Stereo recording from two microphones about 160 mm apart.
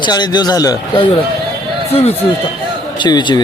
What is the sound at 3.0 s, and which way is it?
Speech, 30° left (ahead or behind).